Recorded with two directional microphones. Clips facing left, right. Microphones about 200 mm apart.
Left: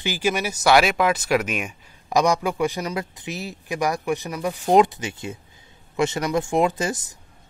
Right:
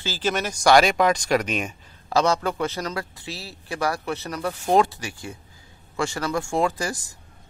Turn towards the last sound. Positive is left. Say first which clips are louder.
# left 2 dB
turn(degrees=20)  # may be behind; listen again after turning